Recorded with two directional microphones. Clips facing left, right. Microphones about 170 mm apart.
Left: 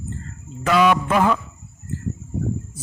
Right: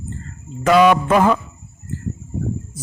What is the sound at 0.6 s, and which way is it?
Speech, 45° right (ahead or behind).